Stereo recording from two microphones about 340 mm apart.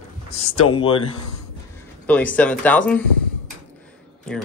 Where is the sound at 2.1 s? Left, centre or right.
Centre.